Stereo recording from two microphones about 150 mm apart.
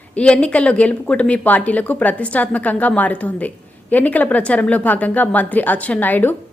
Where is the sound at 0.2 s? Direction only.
5° left (ahead or behind).